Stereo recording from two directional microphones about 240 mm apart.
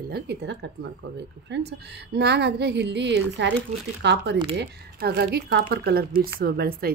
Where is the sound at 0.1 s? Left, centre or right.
Right.